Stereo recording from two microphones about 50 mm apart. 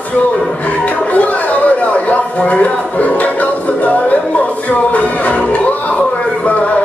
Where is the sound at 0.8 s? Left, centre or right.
Left.